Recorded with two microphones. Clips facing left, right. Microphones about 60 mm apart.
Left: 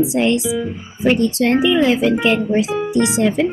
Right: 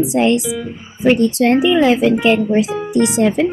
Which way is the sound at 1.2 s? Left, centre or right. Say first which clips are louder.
Right 3 dB; right.